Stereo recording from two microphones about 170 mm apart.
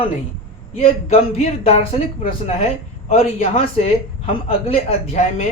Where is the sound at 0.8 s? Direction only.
40° left (ahead or behind).